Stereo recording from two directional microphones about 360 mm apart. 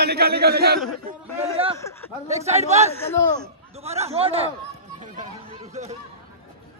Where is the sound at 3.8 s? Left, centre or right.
Centre.